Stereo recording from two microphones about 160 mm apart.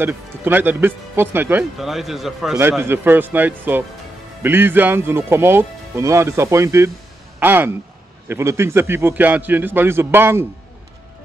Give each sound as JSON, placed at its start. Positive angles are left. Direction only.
{"t": 0.0, "sound": "speech", "side_deg": -10}
{"t": 2.8, "sound": "speech", "side_deg": -15}